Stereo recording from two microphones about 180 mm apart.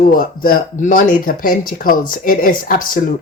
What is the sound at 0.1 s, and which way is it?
Speech, 50° left (ahead or behind).